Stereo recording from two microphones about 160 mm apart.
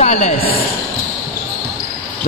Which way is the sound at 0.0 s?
40° left (ahead or behind).